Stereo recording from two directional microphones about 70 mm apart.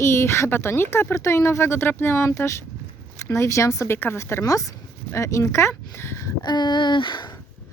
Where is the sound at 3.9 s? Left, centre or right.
Left.